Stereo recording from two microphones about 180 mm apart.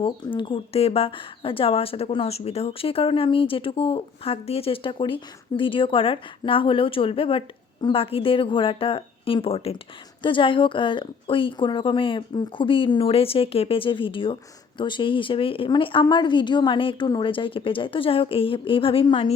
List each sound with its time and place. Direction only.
0.0 s speech: 30° left (ahead or behind)